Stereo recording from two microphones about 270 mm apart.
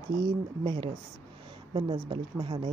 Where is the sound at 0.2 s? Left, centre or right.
Centre.